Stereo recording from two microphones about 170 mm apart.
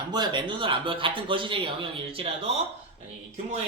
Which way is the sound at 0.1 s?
25° right (ahead or behind).